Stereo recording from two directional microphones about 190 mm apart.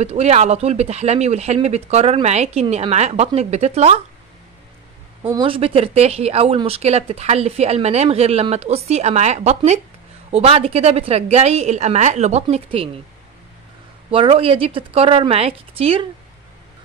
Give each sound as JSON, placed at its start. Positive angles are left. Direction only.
{"t": 0.0, "sound": "speech", "side_deg": -35}
{"t": 5.3, "sound": "speech", "side_deg": -25}
{"t": 14.1, "sound": "speech", "side_deg": -30}